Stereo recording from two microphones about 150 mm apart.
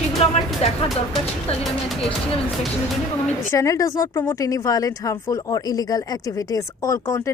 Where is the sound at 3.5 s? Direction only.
20° left (ahead or behind).